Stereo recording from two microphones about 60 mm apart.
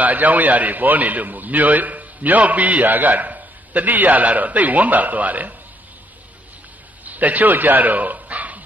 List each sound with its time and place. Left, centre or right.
0.0 s a man's voice: right
7.1 s speech: right